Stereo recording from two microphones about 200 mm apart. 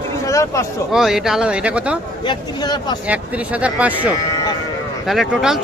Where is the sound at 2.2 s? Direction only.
20° left (ahead or behind).